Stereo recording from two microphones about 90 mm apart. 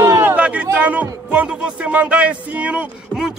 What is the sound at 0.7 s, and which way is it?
Speech, 15° right (ahead or behind).